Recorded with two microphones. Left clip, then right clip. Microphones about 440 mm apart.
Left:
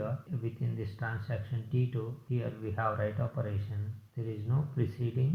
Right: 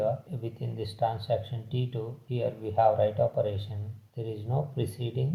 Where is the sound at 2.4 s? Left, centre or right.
Centre.